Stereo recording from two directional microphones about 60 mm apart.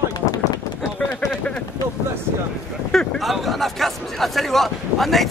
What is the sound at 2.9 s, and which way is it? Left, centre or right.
Speech, centre.